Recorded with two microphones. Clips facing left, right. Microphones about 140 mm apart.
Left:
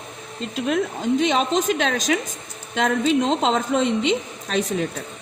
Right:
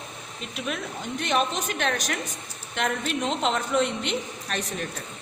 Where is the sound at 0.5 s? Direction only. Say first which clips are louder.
Left 9 dB; 90° left.